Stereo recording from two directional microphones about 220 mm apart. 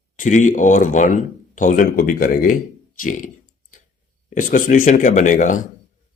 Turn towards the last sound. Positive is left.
turn(degrees=35)  # may be behind; listen again after turning